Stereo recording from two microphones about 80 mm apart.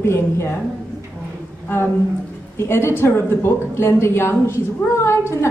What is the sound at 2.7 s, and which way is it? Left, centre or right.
Speech, left.